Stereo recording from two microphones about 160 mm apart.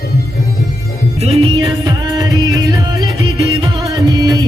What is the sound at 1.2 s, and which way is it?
Music, 40° right (ahead or behind).